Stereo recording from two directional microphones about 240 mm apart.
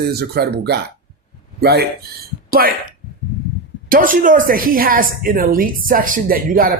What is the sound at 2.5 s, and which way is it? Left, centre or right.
Speech, right.